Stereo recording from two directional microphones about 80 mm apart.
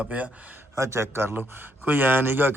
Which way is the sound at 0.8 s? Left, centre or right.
Right.